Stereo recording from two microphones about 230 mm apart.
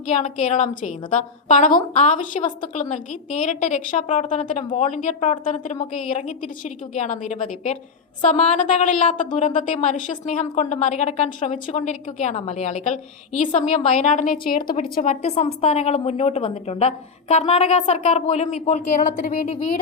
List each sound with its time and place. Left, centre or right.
0.1 s a woman's voice: left